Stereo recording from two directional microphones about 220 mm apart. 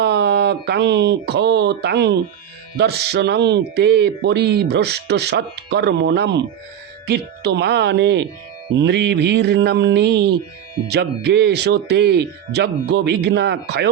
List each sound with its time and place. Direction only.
0.0 s speech: 50° right (ahead or behind)